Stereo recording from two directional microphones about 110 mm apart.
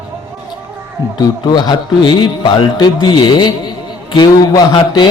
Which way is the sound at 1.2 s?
40° left (ahead or behind).